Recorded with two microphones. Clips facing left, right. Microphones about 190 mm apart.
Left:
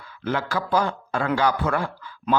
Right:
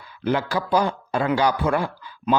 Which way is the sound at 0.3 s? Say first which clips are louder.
Right 3 dB; 15° right (ahead or behind).